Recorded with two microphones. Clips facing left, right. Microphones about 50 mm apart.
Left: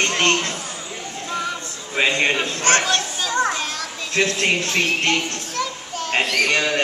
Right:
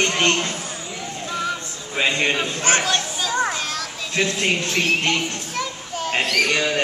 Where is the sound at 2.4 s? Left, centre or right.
Centre.